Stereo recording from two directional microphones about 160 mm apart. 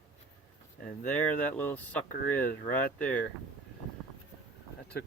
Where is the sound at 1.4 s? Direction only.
10° left (ahead or behind).